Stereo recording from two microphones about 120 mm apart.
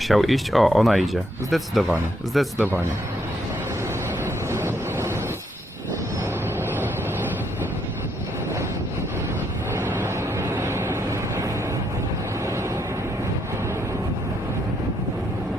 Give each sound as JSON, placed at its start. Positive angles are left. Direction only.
{"t": 0.1, "sound": "speech", "side_deg": 0}
{"t": 2.6, "sound": "speech", "side_deg": -15}
{"t": 4.5, "sound": "vehicle", "side_deg": -20}
{"t": 6.7, "sound": "vehicle", "side_deg": -15}
{"t": 9.7, "sound": "vehicle", "side_deg": -20}